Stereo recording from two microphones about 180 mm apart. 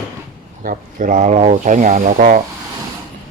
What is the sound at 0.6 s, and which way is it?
Speech, 45° right (ahead or behind).